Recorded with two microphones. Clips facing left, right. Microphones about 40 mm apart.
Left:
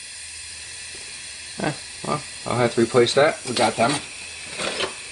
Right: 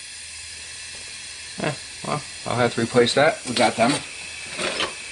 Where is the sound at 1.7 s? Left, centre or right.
Centre.